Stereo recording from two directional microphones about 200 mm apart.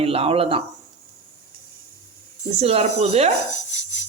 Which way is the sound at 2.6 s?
30° right (ahead or behind).